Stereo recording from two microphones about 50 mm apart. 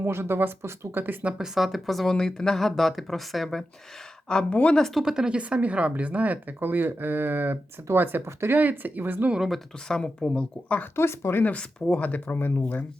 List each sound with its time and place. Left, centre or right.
0.0 s speech: right
1.2 s a woman's voice: right
1.5 s speech: centre
4.3 s speech: centre
4.5 s speech: left
5.0 s a woman's voice: centre
5.4 s a woman's voice: right
6.6 s speech: right
8.2 s speech: right
8.5 s speech: right
9.9 s speech: centre
10.9 s speech: left
11.5 s speech: left
12.3 s speech: left